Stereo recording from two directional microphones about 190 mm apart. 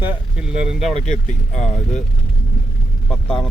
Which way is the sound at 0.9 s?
40° left (ahead or behind).